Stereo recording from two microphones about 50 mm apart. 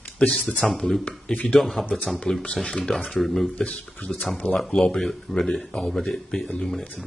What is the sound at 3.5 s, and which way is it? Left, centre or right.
Speech, left.